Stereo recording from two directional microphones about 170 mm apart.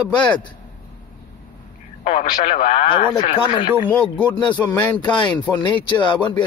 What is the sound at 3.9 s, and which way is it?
Speech, 10° left (ahead or behind).